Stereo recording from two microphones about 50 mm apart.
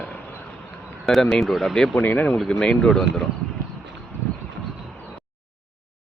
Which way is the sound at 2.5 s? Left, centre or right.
Centre.